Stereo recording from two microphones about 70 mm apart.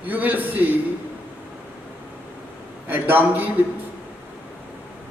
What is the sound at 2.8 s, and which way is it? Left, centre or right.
Speech, right.